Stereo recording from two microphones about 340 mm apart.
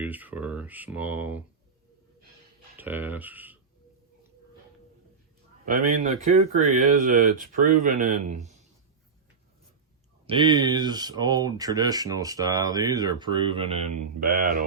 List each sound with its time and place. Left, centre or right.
0.0 s speech: centre
2.7 s speech: centre
5.6 s speech: right
8.4 s a sound: centre
10.2 s speech: centre